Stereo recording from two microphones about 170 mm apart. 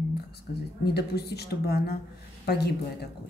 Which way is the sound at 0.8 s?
70° left (ahead or behind).